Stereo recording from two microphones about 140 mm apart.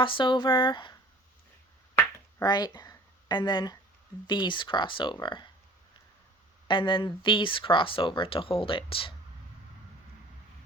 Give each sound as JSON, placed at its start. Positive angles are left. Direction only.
{"t": 0.0, "sound": "speech", "side_deg": 35}
{"t": 2.0, "sound": "a sound", "side_deg": 30}
{"t": 4.3, "sound": "speech", "side_deg": 35}
{"t": 6.7, "sound": "speech", "side_deg": 35}